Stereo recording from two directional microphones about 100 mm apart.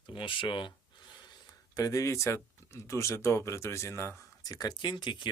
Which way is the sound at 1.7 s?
35° left (ahead or behind).